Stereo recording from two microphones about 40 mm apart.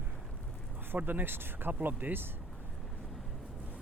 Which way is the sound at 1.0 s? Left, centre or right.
Right.